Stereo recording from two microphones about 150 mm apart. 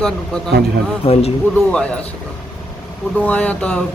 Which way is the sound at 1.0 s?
40° left (ahead or behind).